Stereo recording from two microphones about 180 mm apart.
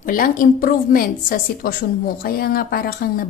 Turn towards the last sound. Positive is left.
turn(degrees=55)  # may be behind; listen again after turning